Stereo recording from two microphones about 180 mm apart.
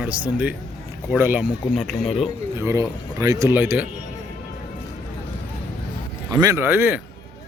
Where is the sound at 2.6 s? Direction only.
15° right (ahead or behind).